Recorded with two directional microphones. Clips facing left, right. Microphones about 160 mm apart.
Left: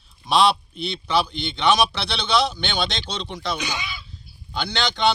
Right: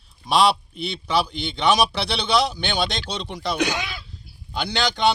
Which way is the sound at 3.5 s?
80° right.